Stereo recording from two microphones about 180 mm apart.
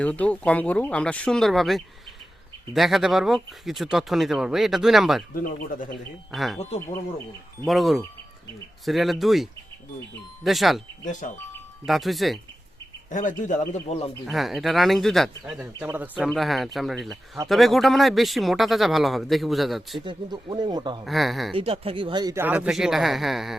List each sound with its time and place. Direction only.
0.0 s speech: 5° left (ahead or behind)
5.3 s speech: 50° left (ahead or behind)
6.3 s speech: centre (ahead or behind)
7.7 s speech: centre (ahead or behind)
11.0 s speech: 45° left (ahead or behind)
11.9 s speech: centre (ahead or behind)
13.1 s speech: 45° left (ahead or behind)
14.3 s speech: centre (ahead or behind)
20.0 s speech: 25° right (ahead or behind)
21.0 s speech: centre (ahead or behind)
21.5 s speech: 30° right (ahead or behind)
22.4 s speech: 5° right (ahead or behind)